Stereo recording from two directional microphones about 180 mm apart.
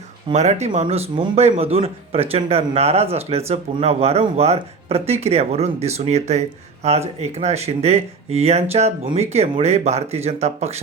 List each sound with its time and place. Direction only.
0.3 s speech: 35° right (ahead or behind)